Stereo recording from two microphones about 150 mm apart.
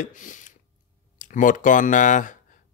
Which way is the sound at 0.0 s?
60° left (ahead or behind).